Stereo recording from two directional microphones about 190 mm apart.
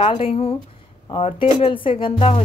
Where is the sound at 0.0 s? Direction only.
35° left (ahead or behind).